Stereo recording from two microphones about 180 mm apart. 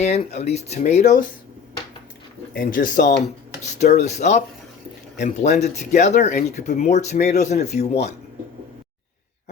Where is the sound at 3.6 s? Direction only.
40° left (ahead or behind).